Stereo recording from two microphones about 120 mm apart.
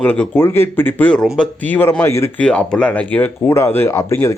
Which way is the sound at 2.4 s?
10° left (ahead or behind).